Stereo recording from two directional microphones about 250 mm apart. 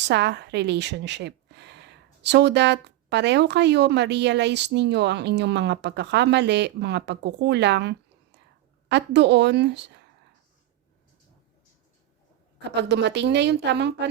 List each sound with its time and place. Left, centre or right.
0.0 s a woman's voice: right
12.7 s a woman's voice: right